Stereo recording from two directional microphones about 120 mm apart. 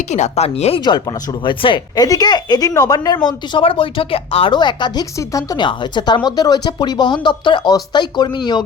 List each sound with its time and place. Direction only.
0.1 s speech: 70° left (ahead or behind)
1.5 s a woman's voice: 45° left (ahead or behind)
3.2 s a woman's voice: 45° left (ahead or behind)